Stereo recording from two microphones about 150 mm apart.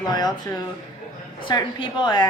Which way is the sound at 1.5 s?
30° left (ahead or behind).